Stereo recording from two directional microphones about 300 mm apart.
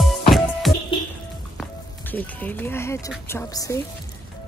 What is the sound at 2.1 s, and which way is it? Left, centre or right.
Speech, centre.